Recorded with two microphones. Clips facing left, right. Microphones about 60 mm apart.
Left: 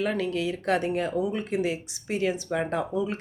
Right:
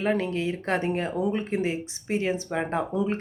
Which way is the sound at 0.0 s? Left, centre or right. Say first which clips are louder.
Right 1 dB; right.